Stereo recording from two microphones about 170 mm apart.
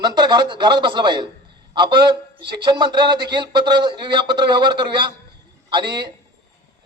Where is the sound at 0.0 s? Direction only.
25° right (ahead or behind).